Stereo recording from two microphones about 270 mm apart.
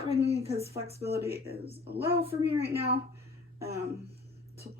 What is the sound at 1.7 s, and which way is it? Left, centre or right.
Speech, right.